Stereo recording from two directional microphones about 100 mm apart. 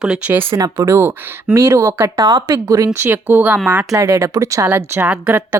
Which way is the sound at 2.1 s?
40° right (ahead or behind).